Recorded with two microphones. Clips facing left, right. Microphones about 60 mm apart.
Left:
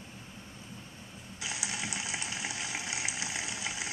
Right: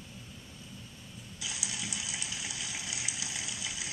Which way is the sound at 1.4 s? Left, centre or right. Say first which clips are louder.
Left 3 dB; left.